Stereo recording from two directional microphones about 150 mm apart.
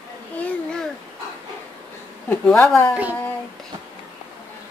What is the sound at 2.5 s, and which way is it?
Speech, 15° left (ahead or behind).